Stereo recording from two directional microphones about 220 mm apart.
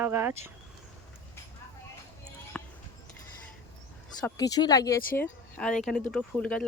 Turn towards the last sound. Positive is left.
turn(degrees=5)  # may be behind; listen again after turning